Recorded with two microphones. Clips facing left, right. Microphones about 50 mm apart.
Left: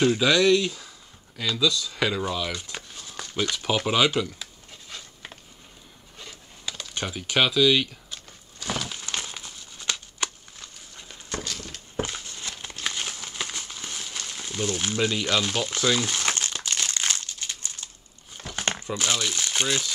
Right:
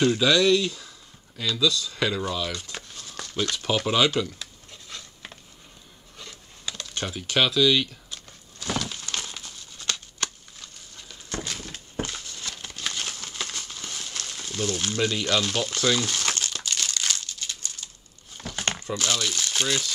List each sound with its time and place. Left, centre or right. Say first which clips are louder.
0.0 s speech: even; centre
6.1 s computer keyboard: even; centre; by 11.3 s left
11.4 s horse: even; centre
12.0 s a sound: left 2 dB; centre
12.3 s crumpling: even; left
18.4 s crumpling: even; centre